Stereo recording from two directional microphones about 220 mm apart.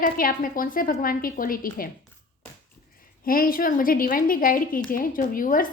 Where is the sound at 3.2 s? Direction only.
40° left (ahead or behind).